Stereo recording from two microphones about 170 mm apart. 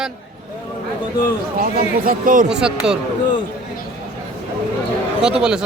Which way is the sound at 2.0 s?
50° right (ahead or behind).